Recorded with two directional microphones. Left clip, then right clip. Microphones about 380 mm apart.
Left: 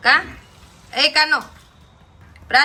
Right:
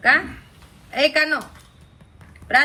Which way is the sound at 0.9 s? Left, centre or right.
Centre.